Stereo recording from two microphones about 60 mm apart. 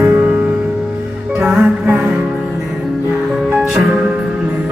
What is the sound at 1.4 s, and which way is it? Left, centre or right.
Music, right.